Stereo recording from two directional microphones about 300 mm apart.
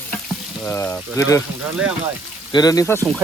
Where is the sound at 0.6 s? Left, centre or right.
Centre.